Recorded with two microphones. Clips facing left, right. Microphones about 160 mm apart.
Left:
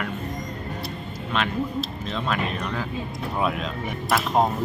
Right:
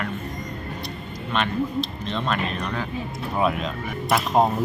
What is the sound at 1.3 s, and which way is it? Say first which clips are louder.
Speech: right 2 dB; 5° left (ahead or behind).